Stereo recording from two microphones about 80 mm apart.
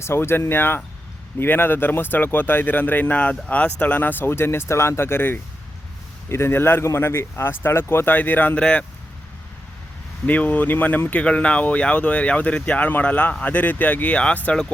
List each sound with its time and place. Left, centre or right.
0.0 s speech: left
10.2 s speech: centre